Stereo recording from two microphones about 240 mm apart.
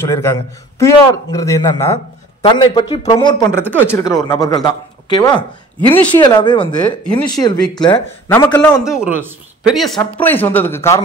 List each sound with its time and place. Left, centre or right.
0.0 s a man's voice: centre
8.8 s a man's voice: centre